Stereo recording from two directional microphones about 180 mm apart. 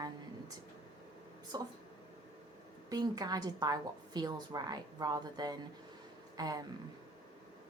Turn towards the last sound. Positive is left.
turn(degrees=-20)  # may be behind; listen again after turning